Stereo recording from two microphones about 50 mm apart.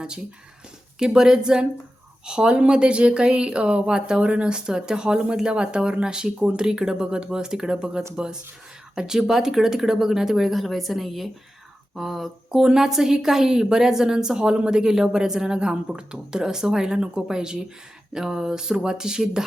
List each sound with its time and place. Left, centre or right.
0.9 s speech: centre